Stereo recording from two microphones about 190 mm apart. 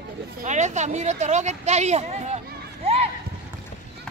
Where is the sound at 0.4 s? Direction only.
40° right (ahead or behind).